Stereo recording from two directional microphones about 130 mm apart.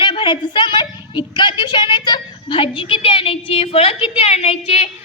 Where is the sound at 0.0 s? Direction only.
35° left (ahead or behind).